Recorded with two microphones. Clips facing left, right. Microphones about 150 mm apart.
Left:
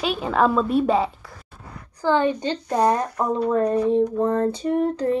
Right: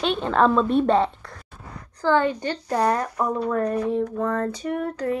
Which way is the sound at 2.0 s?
20° left (ahead or behind).